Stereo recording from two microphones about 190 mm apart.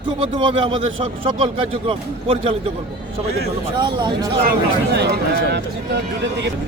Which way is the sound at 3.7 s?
25° right (ahead or behind).